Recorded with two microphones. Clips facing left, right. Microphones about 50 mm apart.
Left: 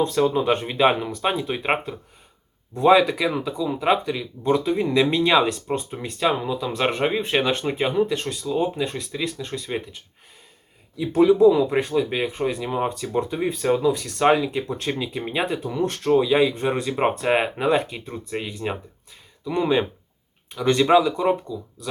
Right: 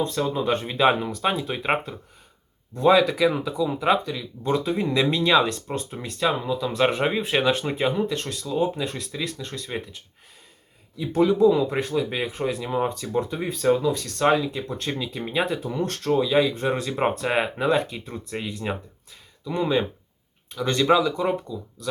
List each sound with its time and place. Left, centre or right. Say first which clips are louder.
0.2 s speech: left 5 dB; left
0.6 s speech: left 1 dB; centre
3.2 s speech: right 1 dB; centre
4.4 s speech: left 3 dB; centre